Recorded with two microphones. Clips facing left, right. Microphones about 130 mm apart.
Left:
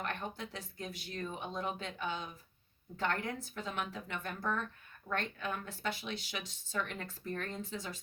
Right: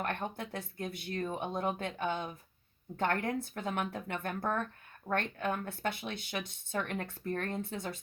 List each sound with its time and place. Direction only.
0.0 s speech: 55° right (ahead or behind)